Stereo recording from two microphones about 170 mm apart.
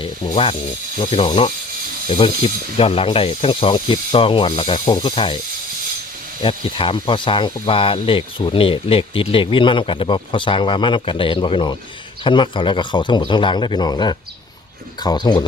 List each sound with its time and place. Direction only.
0.0 s a sound: 30° left (ahead or behind)
1.2 s a man's voice: 30° left (ahead or behind)
6.4 s a man's voice: 30° left (ahead or behind)